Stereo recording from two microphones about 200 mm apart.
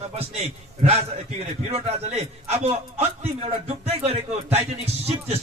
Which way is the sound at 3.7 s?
30° right (ahead or behind).